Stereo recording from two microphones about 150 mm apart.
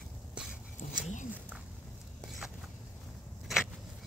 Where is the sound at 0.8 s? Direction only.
55° left (ahead or behind).